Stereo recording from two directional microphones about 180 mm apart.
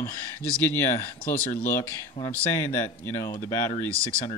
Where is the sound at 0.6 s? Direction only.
10° left (ahead or behind).